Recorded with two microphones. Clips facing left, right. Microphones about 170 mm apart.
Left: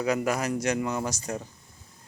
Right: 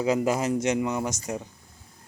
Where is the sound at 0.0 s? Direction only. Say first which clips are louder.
Right 3 dB; 25° right (ahead or behind).